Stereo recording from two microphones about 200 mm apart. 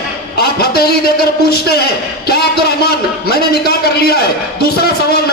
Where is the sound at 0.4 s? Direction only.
50° left (ahead or behind).